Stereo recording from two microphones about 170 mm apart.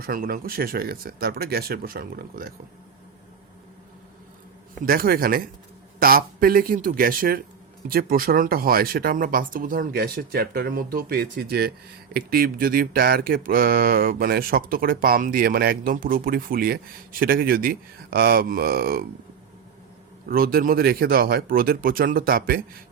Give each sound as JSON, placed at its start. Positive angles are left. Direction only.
{"t": 0.0, "sound": "speech", "side_deg": -55}
{"t": 4.9, "sound": "speech", "side_deg": -60}
{"t": 20.2, "sound": "speech", "side_deg": -60}